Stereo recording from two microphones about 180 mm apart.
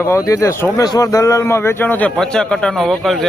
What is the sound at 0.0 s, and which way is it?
Speech, 15° left (ahead or behind).